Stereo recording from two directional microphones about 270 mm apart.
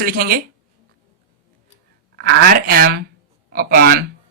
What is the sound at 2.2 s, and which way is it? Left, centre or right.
A woman's voice, right.